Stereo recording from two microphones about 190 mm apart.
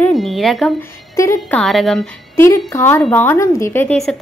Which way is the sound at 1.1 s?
15° left (ahead or behind).